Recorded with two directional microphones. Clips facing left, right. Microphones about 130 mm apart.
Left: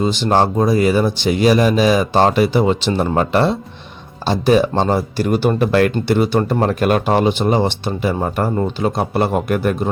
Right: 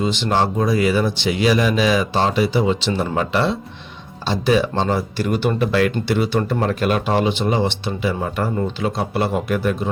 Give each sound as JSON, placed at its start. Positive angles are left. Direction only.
{"t": 0.0, "sound": "speech", "side_deg": 40}